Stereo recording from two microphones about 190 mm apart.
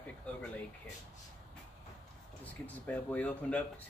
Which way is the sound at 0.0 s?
5° left (ahead or behind).